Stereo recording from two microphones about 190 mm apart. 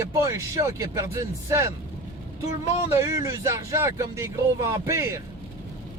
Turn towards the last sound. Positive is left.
turn(degrees=-15)  # may be behind; listen again after turning